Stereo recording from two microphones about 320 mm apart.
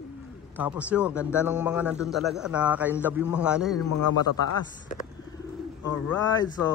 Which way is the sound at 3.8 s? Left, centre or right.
Left.